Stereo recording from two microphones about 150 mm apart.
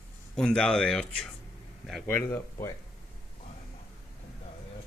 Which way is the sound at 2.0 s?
15° left (ahead or behind).